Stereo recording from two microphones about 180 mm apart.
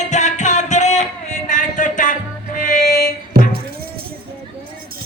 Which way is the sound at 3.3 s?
60° right (ahead or behind).